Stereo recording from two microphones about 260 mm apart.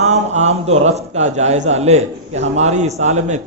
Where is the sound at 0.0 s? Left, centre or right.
Right.